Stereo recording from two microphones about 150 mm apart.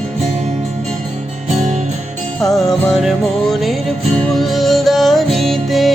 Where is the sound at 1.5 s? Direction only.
50° right (ahead or behind).